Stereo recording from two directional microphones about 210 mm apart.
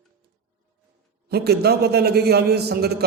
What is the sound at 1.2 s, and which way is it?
A man's voice, 50° right (ahead or behind).